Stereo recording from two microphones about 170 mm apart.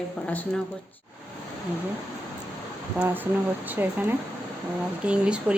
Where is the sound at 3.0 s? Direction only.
10° right (ahead or behind).